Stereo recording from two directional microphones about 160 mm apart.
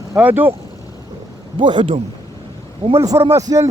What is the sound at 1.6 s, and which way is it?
Speech, 30° right (ahead or behind).